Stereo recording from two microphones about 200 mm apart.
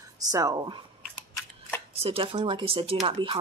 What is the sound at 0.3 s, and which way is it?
Speech, 15° right (ahead or behind).